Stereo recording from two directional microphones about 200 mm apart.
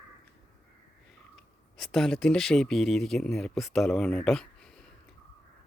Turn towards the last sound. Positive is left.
turn(degrees=5)  # may be behind; listen again after turning